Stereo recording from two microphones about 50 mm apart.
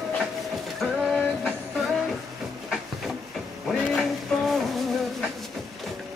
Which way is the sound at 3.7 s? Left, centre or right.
Centre.